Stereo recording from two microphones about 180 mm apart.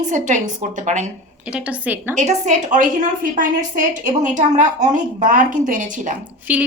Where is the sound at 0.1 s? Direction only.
45° right (ahead or behind).